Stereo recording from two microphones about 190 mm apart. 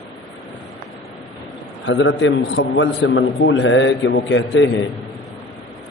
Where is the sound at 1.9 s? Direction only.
80° left.